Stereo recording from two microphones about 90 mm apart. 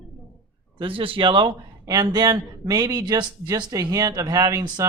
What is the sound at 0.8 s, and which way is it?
Speech, 80° right.